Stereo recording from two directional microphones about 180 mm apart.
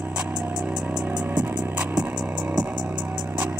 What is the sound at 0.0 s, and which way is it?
Music, 5° right (ahead or behind).